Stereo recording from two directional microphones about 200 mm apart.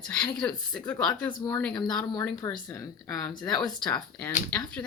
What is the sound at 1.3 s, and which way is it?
Speech, 20° left (ahead or behind).